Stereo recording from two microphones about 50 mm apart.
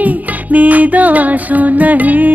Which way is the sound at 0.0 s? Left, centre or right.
Right.